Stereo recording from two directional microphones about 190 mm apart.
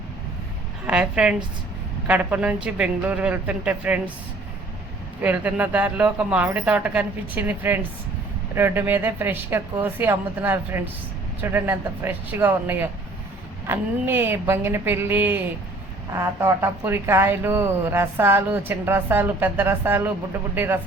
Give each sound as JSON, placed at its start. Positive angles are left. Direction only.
{"t": 0.9, "sound": "a woman's voice", "side_deg": -5}
{"t": 5.2, "sound": "speech", "side_deg": -10}